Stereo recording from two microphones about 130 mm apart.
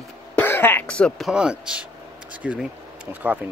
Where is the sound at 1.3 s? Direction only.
5° right (ahead or behind).